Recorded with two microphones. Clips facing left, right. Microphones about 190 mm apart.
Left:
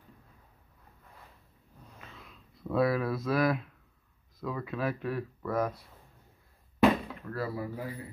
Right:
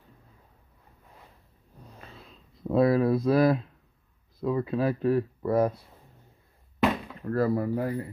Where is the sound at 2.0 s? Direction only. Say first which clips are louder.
Right 2 dB; 35° right (ahead or behind).